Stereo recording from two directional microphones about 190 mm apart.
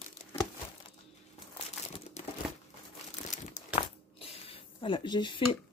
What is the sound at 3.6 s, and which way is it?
Biting, 40° left (ahead or behind).